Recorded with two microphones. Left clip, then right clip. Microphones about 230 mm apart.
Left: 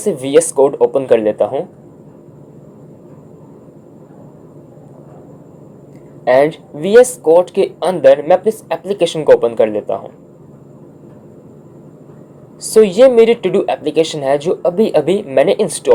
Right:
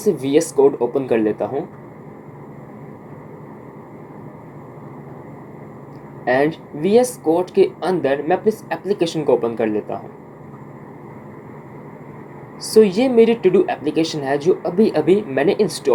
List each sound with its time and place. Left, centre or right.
0.3 s speech: centre
6.2 s speech: centre
12.7 s speech: centre